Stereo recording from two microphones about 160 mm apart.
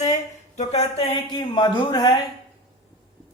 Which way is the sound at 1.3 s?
30° left (ahead or behind).